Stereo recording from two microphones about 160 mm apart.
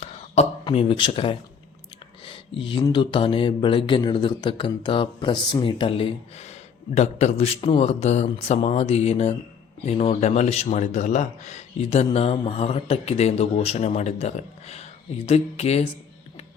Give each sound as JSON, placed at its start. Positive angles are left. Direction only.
{"t": 0.4, "sound": "speech", "side_deg": 40}
{"t": 2.2, "sound": "a sound", "side_deg": 35}
{"t": 2.8, "sound": "speech", "side_deg": 30}